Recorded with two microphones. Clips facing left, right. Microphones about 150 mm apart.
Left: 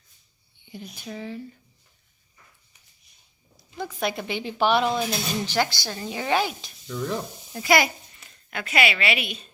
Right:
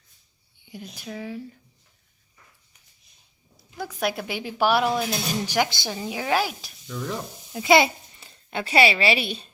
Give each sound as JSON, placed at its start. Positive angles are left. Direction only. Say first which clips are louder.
{"t": 0.6, "sound": "a sound", "louder": "even", "side_deg": -10}
{"t": 1.0, "sound": "speech", "louder": "right 1 dB", "side_deg": -5}
{"t": 3.8, "sound": "a woman's voice", "louder": "right 1 dB", "side_deg": -10}
{"t": 6.0, "sound": "speech", "louder": "even", "side_deg": -5}
{"t": 7.6, "sound": "a child's voice", "louder": "right 3 dB", "side_deg": -25}